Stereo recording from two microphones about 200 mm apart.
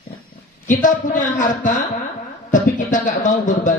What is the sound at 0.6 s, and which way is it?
Speech, 40° left (ahead or behind).